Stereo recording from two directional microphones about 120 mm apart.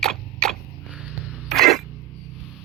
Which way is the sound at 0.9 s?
10° right (ahead or behind).